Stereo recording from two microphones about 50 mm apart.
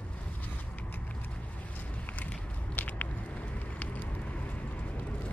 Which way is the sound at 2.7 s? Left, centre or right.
Left.